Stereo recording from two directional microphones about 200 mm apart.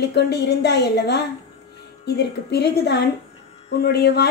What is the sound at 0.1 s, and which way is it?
A woman's voice, 55° left (ahead or behind).